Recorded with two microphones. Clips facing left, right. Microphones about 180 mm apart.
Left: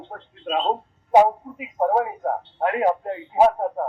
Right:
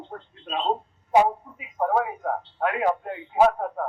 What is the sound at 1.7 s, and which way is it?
A man's voice, 40° left (ahead or behind).